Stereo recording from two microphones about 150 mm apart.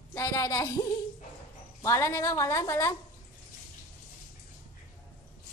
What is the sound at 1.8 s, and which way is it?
A woman's voice, 20° left (ahead or behind).